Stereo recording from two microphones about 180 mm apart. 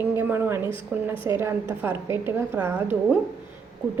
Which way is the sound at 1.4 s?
15° right (ahead or behind).